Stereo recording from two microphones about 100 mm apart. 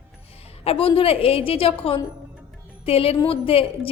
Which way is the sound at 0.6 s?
75° left (ahead or behind).